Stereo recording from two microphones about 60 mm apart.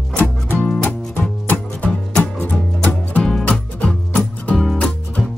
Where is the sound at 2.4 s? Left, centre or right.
Left.